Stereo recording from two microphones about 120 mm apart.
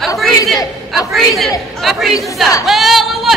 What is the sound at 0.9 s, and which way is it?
A man's voice, centre (ahead or behind).